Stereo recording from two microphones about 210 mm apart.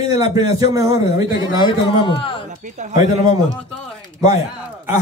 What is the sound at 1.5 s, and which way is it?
Speech, 25° left (ahead or behind).